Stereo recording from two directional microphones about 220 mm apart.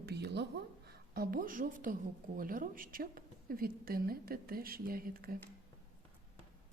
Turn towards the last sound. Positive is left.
turn(degrees=-40)  # may be behind; listen again after turning